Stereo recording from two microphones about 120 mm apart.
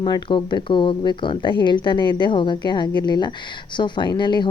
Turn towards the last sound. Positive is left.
turn(degrees=40)  # may be behind; listen again after turning